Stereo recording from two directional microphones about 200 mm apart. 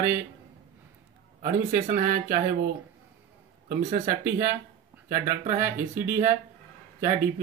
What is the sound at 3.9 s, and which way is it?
Speech, 40° right (ahead or behind).